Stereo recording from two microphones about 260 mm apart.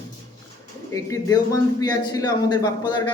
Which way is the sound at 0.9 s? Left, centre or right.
Centre.